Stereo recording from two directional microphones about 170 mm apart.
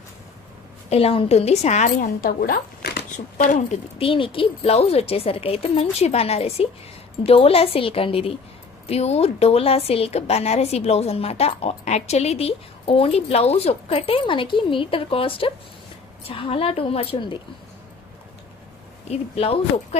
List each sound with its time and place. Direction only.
0.9 s a woman's voice: 35° left (ahead or behind); by 3.1 s 65° left (ahead or behind)
3.3 s a woman's voice: 45° left (ahead or behind); by 17.3 s 30° left (ahead or behind)
19.0 s a woman's voice: 35° left (ahead or behind)